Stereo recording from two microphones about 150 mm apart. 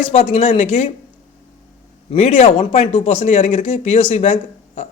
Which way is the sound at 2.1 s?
45° left (ahead or behind).